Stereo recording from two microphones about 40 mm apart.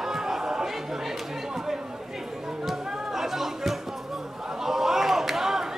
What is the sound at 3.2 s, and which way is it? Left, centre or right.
Chatter, centre.